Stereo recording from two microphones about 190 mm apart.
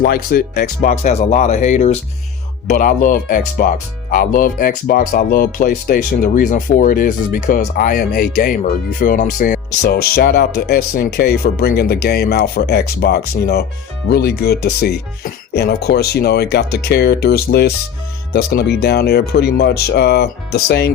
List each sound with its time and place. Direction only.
0.0 s speech: 50° left (ahead or behind)